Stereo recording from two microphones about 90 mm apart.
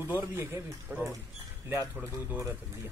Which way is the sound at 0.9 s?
10° right (ahead or behind).